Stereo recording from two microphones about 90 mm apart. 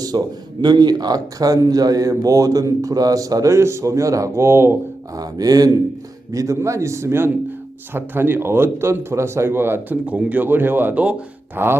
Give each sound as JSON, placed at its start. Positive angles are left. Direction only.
{"t": 0.1, "sound": "a man's voice", "side_deg": -55}
{"t": 5.1, "sound": "speech", "side_deg": -45}